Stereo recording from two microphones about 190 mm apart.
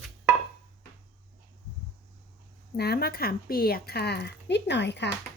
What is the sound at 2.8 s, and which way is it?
Speech, 55° left (ahead or behind).